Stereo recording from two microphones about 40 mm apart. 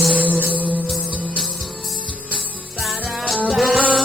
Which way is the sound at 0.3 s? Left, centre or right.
Right.